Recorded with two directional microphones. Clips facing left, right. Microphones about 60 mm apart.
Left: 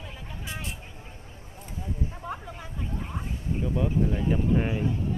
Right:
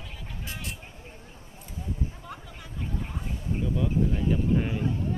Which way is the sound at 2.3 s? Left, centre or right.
Left.